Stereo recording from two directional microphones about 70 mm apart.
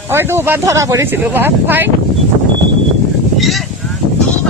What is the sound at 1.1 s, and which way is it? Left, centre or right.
Speech, right.